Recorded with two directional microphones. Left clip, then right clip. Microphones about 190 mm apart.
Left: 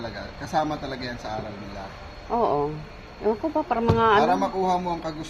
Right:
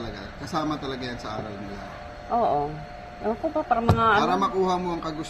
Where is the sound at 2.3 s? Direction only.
30° left (ahead or behind).